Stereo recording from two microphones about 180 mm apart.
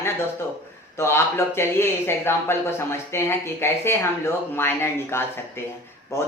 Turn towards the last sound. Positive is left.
turn(degrees=15)  # may be behind; listen again after turning